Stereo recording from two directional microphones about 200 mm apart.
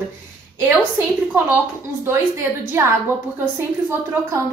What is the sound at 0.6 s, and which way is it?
Speech, 10° right (ahead or behind).